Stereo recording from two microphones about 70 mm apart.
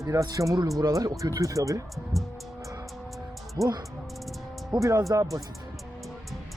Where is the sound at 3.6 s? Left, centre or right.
Right.